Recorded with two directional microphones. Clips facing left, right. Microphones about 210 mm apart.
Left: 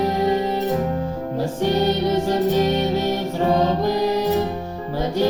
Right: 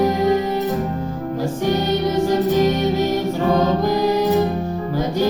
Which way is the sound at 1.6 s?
30° left (ahead or behind).